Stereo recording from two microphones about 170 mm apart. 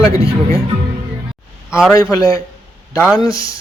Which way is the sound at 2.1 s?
20° left (ahead or behind).